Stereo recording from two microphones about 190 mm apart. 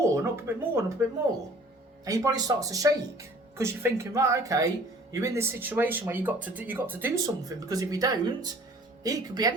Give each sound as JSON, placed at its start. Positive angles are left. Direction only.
{"t": 0.0, "sound": "speech", "side_deg": -15}
{"t": 2.0, "sound": "speech", "side_deg": -20}